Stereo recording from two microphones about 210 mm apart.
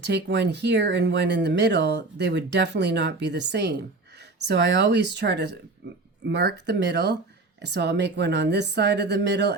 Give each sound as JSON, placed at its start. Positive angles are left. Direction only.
{"t": 0.0, "sound": "speech", "side_deg": -55}